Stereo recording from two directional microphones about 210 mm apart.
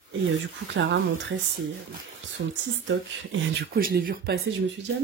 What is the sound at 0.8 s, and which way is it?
Speech, 65° right (ahead or behind).